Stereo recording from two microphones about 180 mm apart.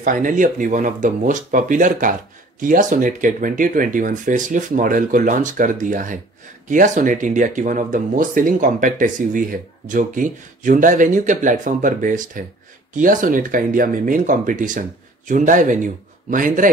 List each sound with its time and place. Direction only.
0.0 s speech: 45° right (ahead or behind)